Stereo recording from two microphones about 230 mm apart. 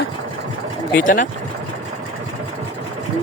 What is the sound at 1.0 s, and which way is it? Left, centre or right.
Speech, left.